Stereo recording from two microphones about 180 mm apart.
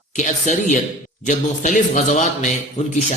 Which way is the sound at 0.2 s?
40° left (ahead or behind).